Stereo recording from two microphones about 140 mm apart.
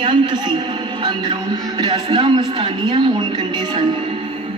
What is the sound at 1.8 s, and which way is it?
A man's voice, 30° right (ahead or behind).